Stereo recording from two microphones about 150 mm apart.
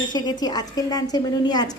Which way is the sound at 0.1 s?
30° left (ahead or behind).